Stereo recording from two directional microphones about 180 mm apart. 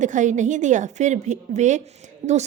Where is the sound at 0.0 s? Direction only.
45° right (ahead or behind).